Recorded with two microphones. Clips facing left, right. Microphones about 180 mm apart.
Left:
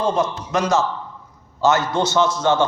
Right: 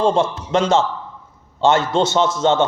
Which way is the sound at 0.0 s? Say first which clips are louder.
Right 3 dB; 30° right (ahead or behind).